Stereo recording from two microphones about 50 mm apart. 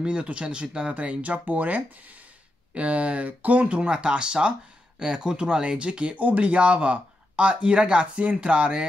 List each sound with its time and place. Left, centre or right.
0.0 s speech: right